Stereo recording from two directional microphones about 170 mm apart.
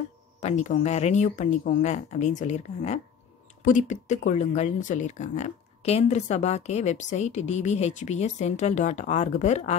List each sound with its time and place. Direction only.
0.4 s speech: 45° left (ahead or behind)